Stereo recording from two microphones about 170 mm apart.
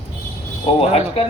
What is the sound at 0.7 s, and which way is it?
Speech, 35° left (ahead or behind).